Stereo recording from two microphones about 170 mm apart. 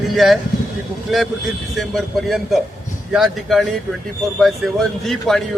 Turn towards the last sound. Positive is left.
turn(degrees=0)  # may be behind; listen again after turning